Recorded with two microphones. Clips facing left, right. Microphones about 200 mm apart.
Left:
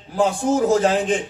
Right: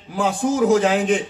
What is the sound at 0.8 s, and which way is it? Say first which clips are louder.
Speech: even; 35° left (ahead or behind).